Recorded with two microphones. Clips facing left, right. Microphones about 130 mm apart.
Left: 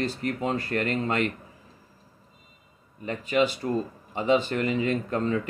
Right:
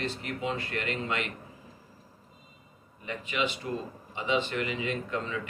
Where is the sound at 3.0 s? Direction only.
40° left (ahead or behind).